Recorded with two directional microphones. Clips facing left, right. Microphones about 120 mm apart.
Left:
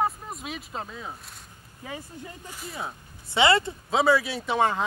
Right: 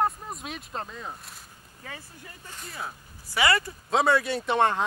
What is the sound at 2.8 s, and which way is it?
Speech, 25° left (ahead or behind).